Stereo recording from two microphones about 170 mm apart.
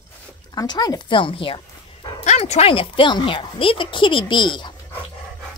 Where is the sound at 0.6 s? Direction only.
25° left (ahead or behind).